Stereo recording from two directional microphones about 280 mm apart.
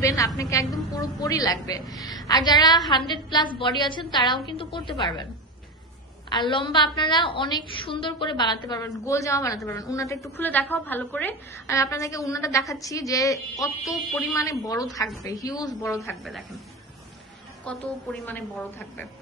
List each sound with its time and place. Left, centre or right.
0.0 s a woman's voice: centre
6.3 s a woman's voice: centre
17.7 s a woman's voice: centre